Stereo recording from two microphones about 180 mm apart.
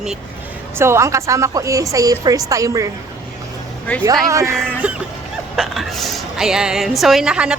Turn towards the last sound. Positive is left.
turn(degrees=-5)  # may be behind; listen again after turning